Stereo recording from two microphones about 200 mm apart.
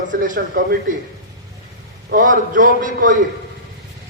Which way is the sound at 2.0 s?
40° right (ahead or behind).